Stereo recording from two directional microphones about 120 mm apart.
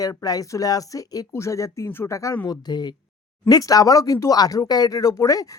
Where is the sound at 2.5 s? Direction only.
35° left (ahead or behind).